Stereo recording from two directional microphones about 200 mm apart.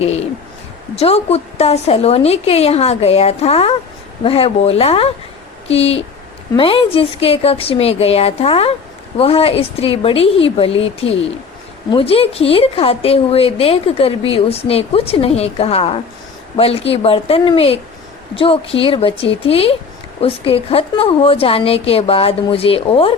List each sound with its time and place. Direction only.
0.0 s a woman's voice: 30° left (ahead or behind)